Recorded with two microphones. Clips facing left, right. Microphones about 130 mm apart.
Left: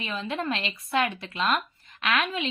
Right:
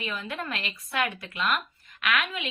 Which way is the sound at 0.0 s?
25° left (ahead or behind).